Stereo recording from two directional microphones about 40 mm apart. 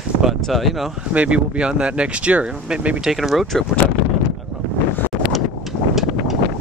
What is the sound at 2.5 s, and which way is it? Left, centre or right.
Speech, right.